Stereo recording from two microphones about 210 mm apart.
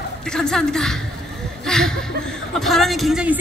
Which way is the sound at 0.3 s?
5° left (ahead or behind).